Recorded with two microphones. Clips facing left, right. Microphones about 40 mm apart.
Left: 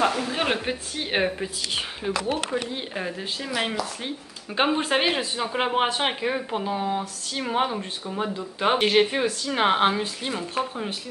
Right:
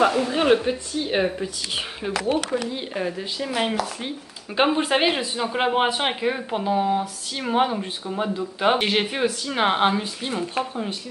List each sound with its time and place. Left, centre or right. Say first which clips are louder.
0.0 s speech: right 4 dB; centre
0.4 s speech: right 8 dB; centre
0.9 s speech: right 2 dB; left
2.0 s speech: even; centre
2.5 s speech: right 2 dB; centre